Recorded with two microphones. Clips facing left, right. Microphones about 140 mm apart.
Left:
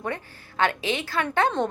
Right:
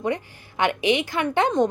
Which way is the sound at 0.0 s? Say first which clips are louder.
Right 5 dB; 15° right (ahead or behind).